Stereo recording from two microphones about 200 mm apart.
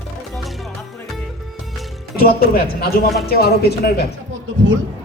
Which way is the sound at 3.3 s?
50° left (ahead or behind).